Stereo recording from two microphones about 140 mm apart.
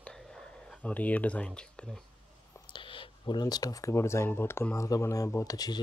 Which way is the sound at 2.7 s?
35° left (ahead or behind).